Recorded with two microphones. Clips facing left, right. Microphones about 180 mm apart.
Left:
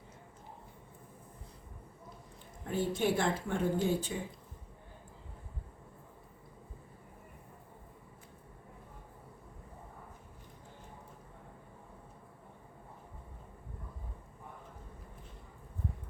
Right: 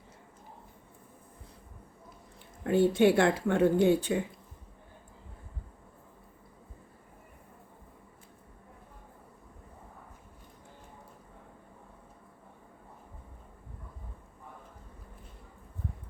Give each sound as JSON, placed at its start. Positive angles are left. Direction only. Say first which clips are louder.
{"t": 2.6, "sound": "speech", "louder": "right 9 dB", "side_deg": -70}